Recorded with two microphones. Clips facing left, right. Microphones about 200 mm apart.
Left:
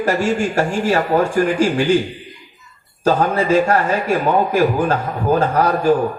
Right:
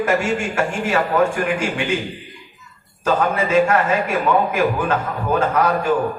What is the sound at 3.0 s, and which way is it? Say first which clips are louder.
A man's voice: left 3 dB; 35° left (ahead or behind).